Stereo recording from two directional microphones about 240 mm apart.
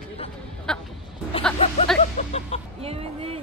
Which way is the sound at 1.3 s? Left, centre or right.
Left.